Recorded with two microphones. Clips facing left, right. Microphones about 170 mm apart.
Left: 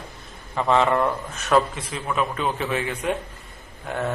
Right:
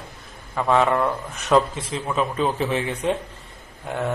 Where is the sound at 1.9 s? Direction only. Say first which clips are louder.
Right 1 dB; 30° right (ahead or behind).